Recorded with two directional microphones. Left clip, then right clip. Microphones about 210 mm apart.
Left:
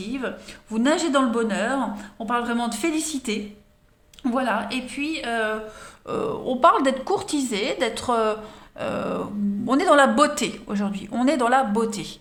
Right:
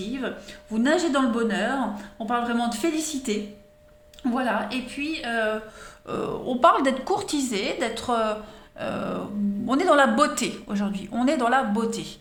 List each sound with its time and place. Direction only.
0.0 s speech: 30° left (ahead or behind)